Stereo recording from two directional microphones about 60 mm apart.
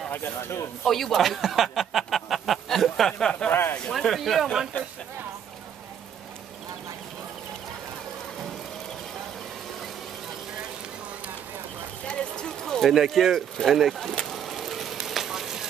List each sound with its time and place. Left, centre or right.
0.1 s speech: left
0.8 s speech: centre
3.9 s speech: centre
12.1 s run: centre
12.9 s a sound: centre